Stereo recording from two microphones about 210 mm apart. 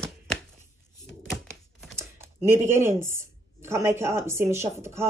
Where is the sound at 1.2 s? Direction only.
Centre (ahead or behind).